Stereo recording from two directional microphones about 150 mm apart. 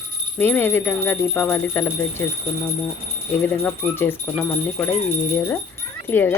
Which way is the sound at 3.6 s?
10° left (ahead or behind).